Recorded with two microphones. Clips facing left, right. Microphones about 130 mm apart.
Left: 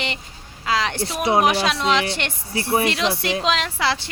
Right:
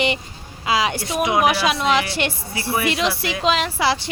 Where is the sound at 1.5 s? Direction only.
5° right (ahead or behind).